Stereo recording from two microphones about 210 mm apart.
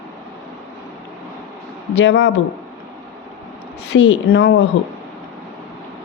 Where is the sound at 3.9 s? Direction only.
60° left (ahead or behind).